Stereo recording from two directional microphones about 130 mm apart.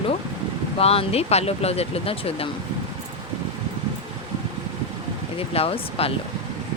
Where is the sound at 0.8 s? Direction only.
50° left (ahead or behind).